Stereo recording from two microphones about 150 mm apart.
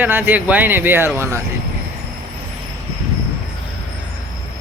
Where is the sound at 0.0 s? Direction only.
15° right (ahead or behind).